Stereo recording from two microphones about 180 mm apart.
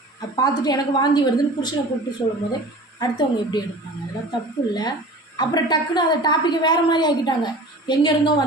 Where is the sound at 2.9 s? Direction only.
20° left (ahead or behind).